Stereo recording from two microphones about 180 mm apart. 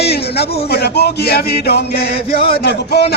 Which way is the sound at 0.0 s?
65° left (ahead or behind).